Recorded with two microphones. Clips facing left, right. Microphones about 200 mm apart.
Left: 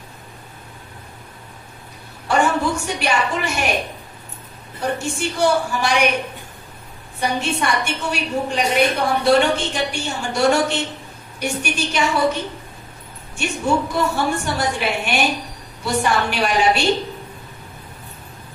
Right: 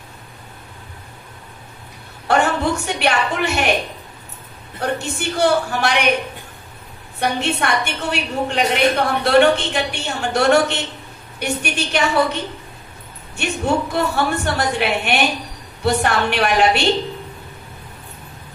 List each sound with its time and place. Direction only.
2.2 s a woman's voice: 60° right (ahead or behind)
4.7 s a woman's voice: 60° right (ahead or behind)
7.2 s a woman's voice: 65° right (ahead or behind)
13.4 s a woman's voice: 60° right (ahead or behind)